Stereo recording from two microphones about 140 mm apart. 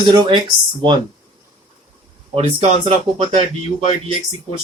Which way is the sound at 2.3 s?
40° right (ahead or behind).